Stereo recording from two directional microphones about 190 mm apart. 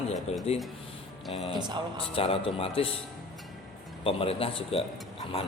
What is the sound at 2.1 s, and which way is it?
Speech, 30° left (ahead or behind).